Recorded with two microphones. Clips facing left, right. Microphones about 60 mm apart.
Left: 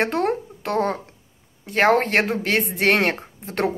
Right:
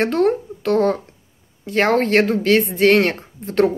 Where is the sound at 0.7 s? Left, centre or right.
Centre.